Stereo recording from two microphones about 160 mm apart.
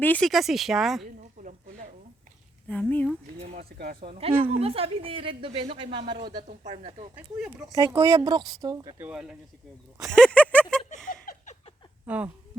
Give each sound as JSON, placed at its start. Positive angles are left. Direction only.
{"t": 0.0, "sound": "speech", "side_deg": 5}
{"t": 1.4, "sound": "a sound", "side_deg": -60}
{"t": 2.6, "sound": "speech", "side_deg": 10}
{"t": 3.4, "sound": "speech", "side_deg": -40}
{"t": 3.7, "sound": "a man's voice", "side_deg": -70}
{"t": 4.0, "sound": "speech", "side_deg": -40}
{"t": 7.2, "sound": "speech", "side_deg": -5}
{"t": 7.7, "sound": "speech", "side_deg": -25}
{"t": 9.0, "sound": "speech", "side_deg": -5}
{"t": 10.0, "sound": "a sound", "side_deg": 5}
{"t": 11.1, "sound": "a sound", "side_deg": 60}
{"t": 12.0, "sound": "speech", "side_deg": -10}